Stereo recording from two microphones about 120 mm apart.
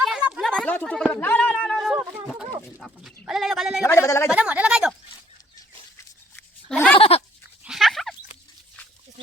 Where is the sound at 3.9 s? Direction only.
25° left (ahead or behind).